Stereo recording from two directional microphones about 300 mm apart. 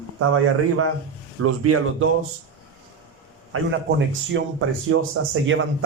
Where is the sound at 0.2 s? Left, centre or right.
Right.